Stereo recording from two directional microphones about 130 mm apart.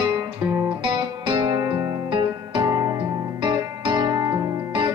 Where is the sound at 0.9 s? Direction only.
35° right (ahead or behind).